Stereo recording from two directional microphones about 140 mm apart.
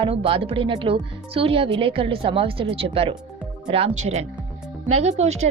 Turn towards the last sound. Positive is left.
turn(degrees=-50)  # may be behind; listen again after turning